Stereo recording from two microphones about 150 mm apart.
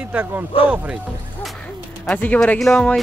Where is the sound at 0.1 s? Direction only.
10° right (ahead or behind).